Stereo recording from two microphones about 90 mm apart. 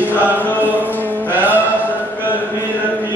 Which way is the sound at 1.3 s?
20° right (ahead or behind).